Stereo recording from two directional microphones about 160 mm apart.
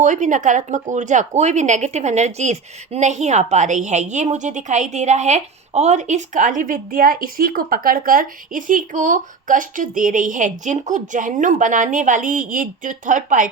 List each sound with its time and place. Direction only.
0.0 s speech: 50° right (ahead or behind)